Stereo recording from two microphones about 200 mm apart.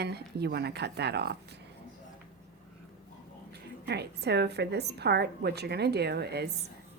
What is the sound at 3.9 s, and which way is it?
A woman's voice, 55° right (ahead or behind).